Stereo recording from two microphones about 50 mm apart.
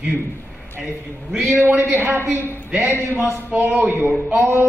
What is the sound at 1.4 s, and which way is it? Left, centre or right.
A woman's voice, right.